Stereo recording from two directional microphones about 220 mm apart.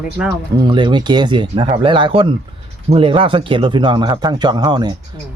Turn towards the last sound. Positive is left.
turn(degrees=-20)  # may be behind; listen again after turning